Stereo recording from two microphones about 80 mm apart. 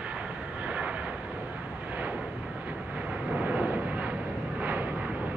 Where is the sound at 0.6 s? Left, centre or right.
Centre.